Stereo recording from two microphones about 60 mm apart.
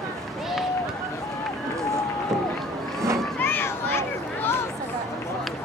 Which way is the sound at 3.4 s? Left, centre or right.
Left.